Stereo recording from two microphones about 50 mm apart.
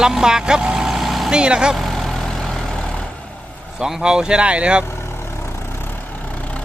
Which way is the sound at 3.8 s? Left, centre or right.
Centre.